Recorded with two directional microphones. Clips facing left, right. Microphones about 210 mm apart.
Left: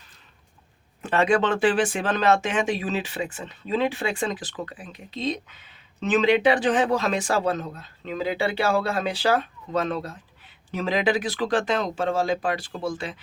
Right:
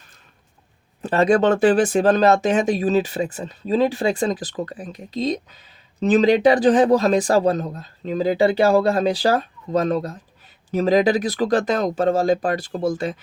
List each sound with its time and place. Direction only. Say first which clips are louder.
1.0 s speech: right 5 dB; 40° right (ahead or behind)